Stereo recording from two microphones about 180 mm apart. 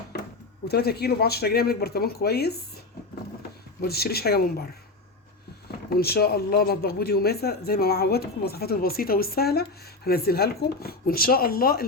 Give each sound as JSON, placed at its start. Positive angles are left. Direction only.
{"t": 0.1, "sound": "a sound", "side_deg": 60}
{"t": 0.7, "sound": "a man's voice", "side_deg": 60}
{"t": 3.8, "sound": "a man's voice", "side_deg": 60}
{"t": 5.9, "sound": "a man's voice", "side_deg": 60}